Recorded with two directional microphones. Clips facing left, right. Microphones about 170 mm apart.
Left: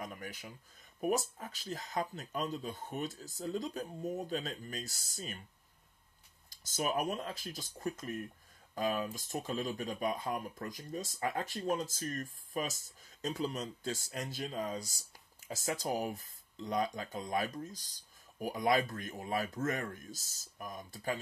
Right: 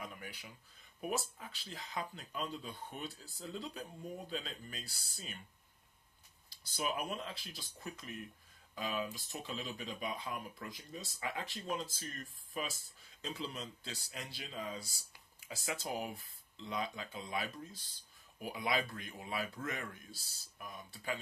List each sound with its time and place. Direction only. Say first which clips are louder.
0.0 s a sound: left 4 dB; 45° left (ahead or behind)
1.0 s speech: left 6 dB; 45° left (ahead or behind)
6.5 s speech: left 4 dB; 45° left (ahead or behind)